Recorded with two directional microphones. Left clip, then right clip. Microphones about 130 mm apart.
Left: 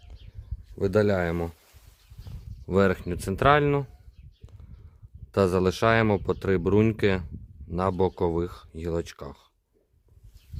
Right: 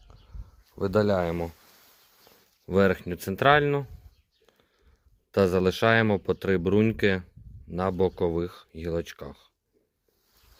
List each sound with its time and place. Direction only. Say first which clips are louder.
0.8 s speech: left 1 dB; 25° left (ahead or behind)
2.6 s speech: even; 15° left (ahead or behind)
5.3 s speech: even; 15° left (ahead or behind)